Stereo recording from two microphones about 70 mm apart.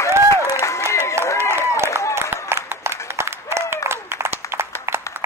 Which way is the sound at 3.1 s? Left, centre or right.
Right.